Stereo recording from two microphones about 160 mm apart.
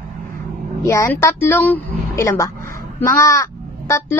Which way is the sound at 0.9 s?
20° left (ahead or behind).